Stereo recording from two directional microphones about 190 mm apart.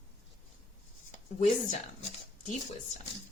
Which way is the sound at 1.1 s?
40° left (ahead or behind).